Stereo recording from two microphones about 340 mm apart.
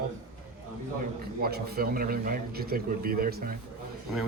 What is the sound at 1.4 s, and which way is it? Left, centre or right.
Speech, right.